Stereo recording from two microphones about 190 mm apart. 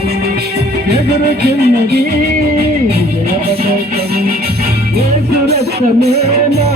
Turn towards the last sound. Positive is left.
turn(degrees=-60)  # may be behind; listen again after turning